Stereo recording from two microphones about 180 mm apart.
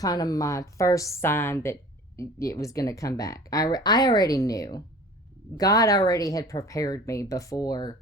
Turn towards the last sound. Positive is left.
turn(degrees=20)  # may be behind; listen again after turning